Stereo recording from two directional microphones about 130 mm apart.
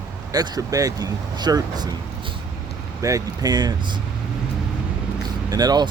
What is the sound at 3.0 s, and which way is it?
Speech, 25° right (ahead or behind).